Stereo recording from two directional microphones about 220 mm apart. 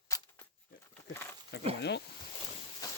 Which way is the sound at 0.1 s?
15° left (ahead or behind).